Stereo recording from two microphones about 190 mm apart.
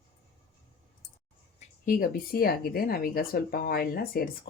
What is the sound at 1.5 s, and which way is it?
Speech, 45° left (ahead or behind).